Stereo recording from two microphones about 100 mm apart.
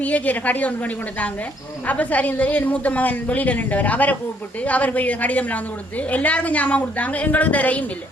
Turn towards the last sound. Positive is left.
turn(degrees=15)  # may be behind; listen again after turning